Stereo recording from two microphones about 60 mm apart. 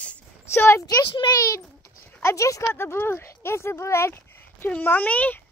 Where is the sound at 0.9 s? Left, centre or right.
Left.